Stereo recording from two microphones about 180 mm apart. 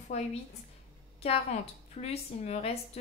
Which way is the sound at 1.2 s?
35° left (ahead or behind).